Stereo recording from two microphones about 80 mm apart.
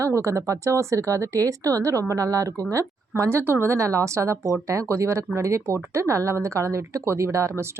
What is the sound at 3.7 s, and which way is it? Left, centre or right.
Speech, right.